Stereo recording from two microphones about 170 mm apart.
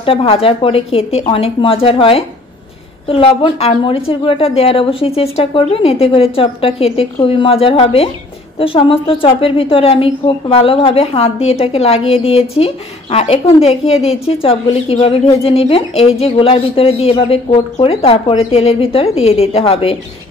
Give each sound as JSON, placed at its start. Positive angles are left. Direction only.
{"t": 0.0, "sound": "a woman's voice", "side_deg": 35}